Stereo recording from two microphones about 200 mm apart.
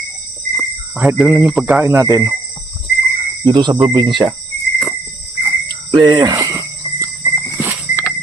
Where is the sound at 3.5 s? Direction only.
20° right (ahead or behind).